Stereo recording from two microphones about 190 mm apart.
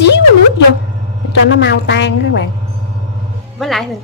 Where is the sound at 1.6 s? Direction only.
65° left (ahead or behind).